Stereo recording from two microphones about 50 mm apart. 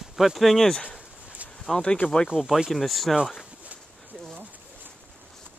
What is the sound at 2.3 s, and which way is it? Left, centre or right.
Speech, centre.